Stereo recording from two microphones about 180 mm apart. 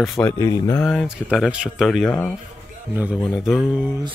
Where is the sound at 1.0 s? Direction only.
5° right (ahead or behind).